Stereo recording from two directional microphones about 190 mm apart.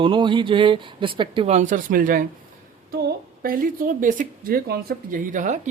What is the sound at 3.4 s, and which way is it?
Speech, 50° right (ahead or behind).